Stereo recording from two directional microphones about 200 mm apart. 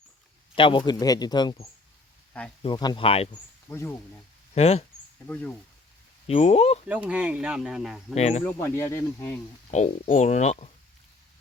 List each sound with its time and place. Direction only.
0.5 s a man's voice: 25° left (ahead or behind)
2.6 s a man's voice: 20° left (ahead or behind)
3.7 s speech: 10° left (ahead or behind)
4.5 s speech: 30° left (ahead or behind)
5.3 s speech: 5° left (ahead or behind)
6.2 s speech: 30° left (ahead or behind)
6.8 s speech: 5° right (ahead or behind)
8.1 s speech: 35° left (ahead or behind)
8.4 s speech: 15° left (ahead or behind)
9.7 s speech: 35° left (ahead or behind)